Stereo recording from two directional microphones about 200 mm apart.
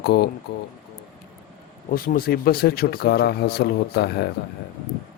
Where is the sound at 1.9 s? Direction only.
45° left (ahead or behind).